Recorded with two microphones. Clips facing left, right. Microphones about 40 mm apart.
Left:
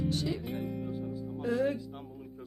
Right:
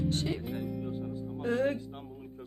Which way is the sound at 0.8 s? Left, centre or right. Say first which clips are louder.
Even; right.